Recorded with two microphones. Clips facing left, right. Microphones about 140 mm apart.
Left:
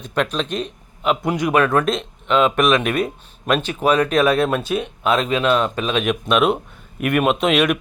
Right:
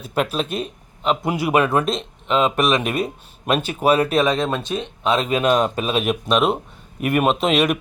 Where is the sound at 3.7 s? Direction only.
35° right (ahead or behind).